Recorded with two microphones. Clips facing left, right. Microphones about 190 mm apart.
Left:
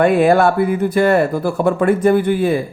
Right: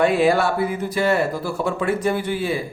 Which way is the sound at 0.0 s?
55° left (ahead or behind).